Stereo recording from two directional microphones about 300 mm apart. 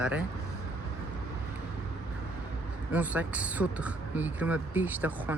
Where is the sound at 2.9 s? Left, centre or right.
Centre.